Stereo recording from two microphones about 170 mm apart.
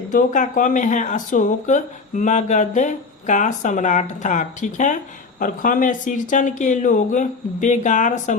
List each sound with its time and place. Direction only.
0.1 s speech: 50° left (ahead or behind)